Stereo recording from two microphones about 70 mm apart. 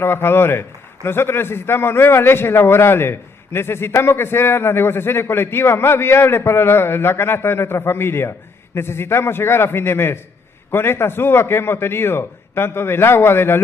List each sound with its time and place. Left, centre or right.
0.0 s a man's voice: left